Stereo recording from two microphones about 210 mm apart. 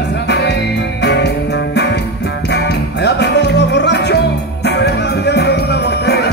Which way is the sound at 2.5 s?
55° left (ahead or behind).